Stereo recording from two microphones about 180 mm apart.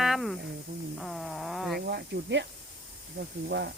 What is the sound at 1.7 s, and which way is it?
Speech, 65° right (ahead or behind).